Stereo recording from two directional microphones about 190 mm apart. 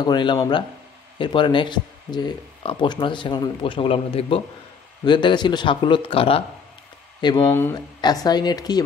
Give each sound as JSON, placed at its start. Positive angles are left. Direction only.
{"t": 0.0, "sound": "speech", "side_deg": 25}